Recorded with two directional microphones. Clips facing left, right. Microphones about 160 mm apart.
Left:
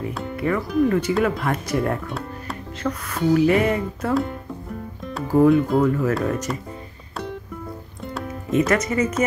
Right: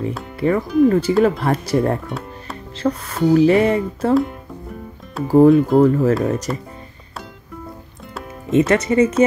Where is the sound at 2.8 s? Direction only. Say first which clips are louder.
Right 5 dB; 30° right (ahead or behind).